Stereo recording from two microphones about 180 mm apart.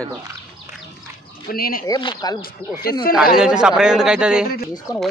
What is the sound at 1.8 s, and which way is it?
Speech, 25° left (ahead or behind).